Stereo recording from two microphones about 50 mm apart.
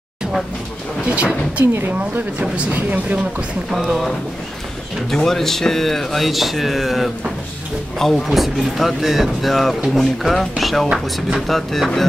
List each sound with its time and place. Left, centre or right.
1.0 s speech: right
1.7 s speech: right
2.0 s speech: right
3.7 s speech: centre
5.1 s speech: centre